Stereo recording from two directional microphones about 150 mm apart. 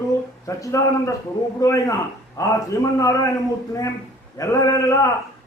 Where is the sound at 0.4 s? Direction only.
20° left (ahead or behind).